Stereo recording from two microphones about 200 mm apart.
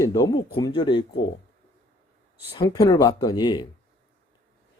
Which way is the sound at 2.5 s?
20° left (ahead or behind).